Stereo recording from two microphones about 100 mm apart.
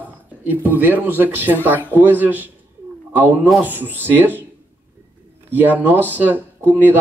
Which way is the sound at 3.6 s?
20° right (ahead or behind).